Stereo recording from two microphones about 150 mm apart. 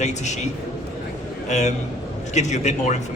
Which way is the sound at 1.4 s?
50° left (ahead or behind).